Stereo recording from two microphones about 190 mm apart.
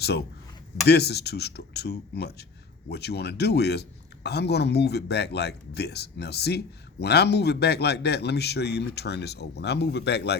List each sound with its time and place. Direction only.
0.0 s speech: 60° left (ahead or behind)